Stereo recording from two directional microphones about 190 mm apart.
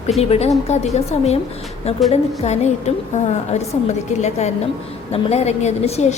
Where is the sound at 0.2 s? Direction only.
35° left (ahead or behind).